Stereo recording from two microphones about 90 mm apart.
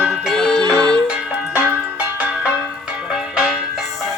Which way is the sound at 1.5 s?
25° right (ahead or behind).